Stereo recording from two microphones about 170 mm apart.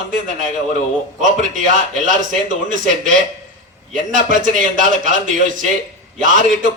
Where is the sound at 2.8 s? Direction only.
50° right (ahead or behind).